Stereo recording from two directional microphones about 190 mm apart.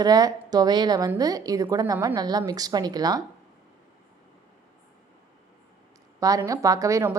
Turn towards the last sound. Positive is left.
turn(degrees=-15)  # may be behind; listen again after turning